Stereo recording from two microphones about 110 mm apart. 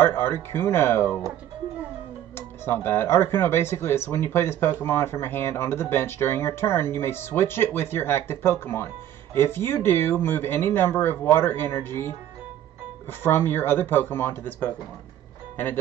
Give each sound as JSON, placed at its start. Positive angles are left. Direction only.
{"t": 0.0, "sound": "speech", "side_deg": 20}
{"t": 2.3, "sound": "speech", "side_deg": 20}
{"t": 13.2, "sound": "speech", "side_deg": 20}